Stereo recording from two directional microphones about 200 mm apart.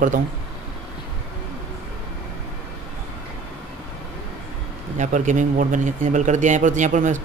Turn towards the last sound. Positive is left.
turn(degrees=-40)  # may be behind; listen again after turning